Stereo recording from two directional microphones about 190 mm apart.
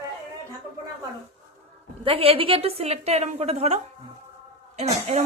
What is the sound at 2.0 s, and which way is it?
Speech, 30° right (ahead or behind).